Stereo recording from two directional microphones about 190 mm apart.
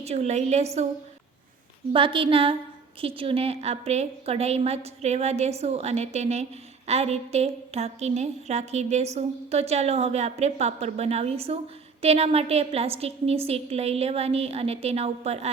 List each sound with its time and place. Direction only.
0.0 s a woman's voice: 35° right (ahead or behind)
1.9 s a woman's voice: 25° right (ahead or behind)